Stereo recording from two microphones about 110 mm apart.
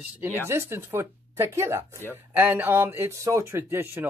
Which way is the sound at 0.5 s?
25° right (ahead or behind).